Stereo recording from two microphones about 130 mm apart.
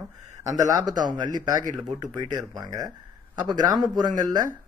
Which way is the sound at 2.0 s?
30° right (ahead or behind).